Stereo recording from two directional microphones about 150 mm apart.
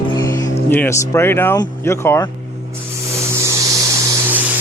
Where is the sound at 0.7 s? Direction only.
15° left (ahead or behind).